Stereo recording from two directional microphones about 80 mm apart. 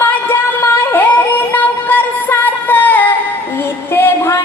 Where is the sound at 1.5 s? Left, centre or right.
Left.